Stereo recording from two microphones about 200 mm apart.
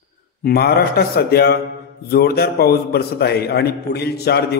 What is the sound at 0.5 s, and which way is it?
A man's voice, 50° left (ahead or behind).